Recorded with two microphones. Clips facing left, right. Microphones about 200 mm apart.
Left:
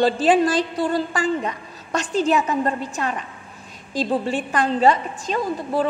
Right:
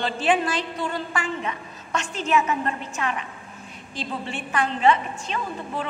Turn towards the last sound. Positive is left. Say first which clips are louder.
# left 8 dB
turn(degrees=35)  # may be behind; listen again after turning